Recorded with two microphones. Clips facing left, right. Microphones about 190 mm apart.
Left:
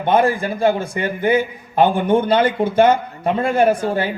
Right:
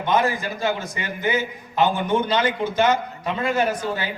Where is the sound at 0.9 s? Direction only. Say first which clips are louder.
Left 7 dB; 55° left (ahead or behind).